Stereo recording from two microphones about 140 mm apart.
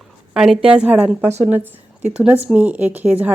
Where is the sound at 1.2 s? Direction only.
50° right (ahead or behind).